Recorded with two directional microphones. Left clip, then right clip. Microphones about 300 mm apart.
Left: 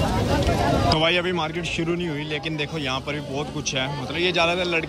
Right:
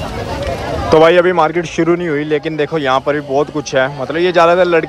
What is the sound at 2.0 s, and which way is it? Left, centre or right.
Speech, right.